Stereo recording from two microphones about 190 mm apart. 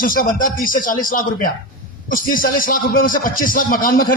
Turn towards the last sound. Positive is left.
turn(degrees=45)  # may be behind; listen again after turning